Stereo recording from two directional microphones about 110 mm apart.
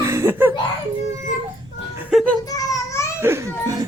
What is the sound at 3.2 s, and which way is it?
Speech, 25° right (ahead or behind).